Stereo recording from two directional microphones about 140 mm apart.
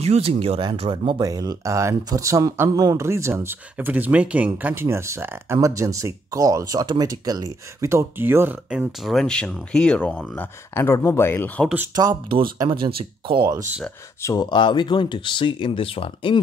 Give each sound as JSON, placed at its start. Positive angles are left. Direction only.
{"t": 0.0, "sound": "speech", "side_deg": -45}
{"t": 11.9, "sound": "speech", "side_deg": -25}
{"t": 14.2, "sound": "speech", "side_deg": 30}